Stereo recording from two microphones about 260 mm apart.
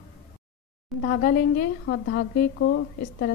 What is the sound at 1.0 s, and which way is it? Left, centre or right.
A woman's voice, left.